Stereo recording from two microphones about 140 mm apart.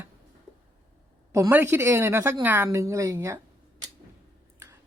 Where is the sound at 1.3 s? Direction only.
15° right (ahead or behind).